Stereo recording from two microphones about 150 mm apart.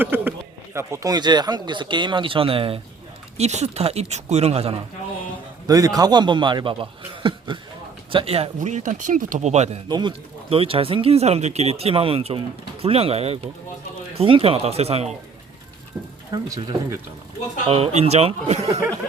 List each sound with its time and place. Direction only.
0.0 s speech: 15° right (ahead or behind); by 4.8 s 45° right (ahead or behind)
5.6 s speech: 25° right (ahead or behind); by 8.4 s 40° right (ahead or behind)
8.5 s speech: 55° right (ahead or behind)
9.9 s speech: 35° right (ahead or behind)
17.7 s speech: 40° right (ahead or behind)